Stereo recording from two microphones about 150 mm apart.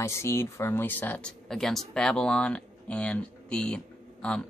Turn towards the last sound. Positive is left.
turn(degrees=5)  # may be behind; listen again after turning